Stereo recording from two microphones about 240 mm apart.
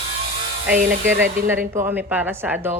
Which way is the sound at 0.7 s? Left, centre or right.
Right.